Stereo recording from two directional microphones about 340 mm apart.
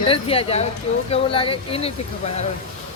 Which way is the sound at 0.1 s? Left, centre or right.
Centre.